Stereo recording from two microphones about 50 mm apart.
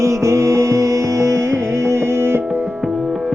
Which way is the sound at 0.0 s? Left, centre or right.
Right.